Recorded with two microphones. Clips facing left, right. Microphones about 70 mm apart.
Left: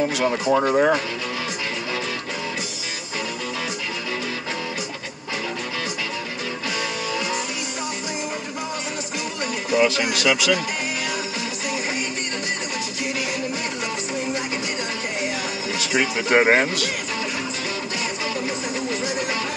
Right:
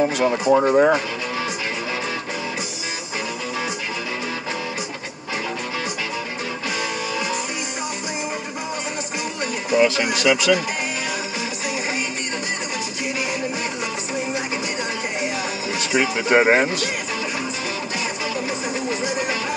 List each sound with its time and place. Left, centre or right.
0.1 s speech: centre
9.7 s speech: centre
15.8 s speech: centre
19.0 s music: right